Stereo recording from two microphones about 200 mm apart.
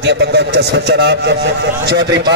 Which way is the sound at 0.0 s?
55° right (ahead or behind).